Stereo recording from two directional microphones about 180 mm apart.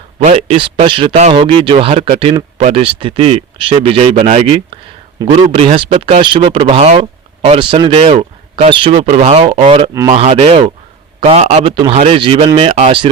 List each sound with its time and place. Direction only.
0.2 s speech: 35° right (ahead or behind)
9.0 s speech: 40° right (ahead or behind)